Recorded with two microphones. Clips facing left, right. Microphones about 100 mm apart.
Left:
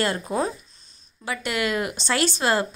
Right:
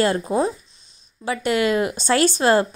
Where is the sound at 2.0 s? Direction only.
40° right (ahead or behind).